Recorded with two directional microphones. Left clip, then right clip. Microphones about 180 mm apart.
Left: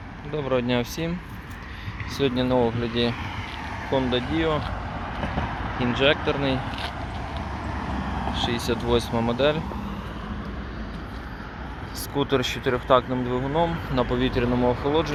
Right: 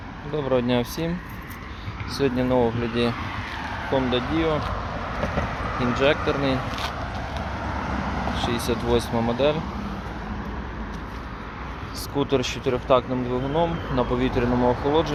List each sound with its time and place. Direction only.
0.3 s speech: 15° right (ahead or behind)
2.2 s speech: centre (ahead or behind)
5.7 s speech: 30° right (ahead or behind)
6.0 s speech: centre (ahead or behind)
8.4 s speech: centre (ahead or behind)
12.1 s speech: centre (ahead or behind)